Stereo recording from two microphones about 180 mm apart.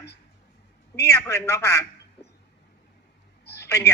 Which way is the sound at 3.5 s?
15° left (ahead or behind).